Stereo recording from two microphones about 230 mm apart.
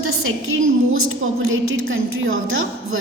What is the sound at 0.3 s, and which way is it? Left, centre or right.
A woman's voice, right.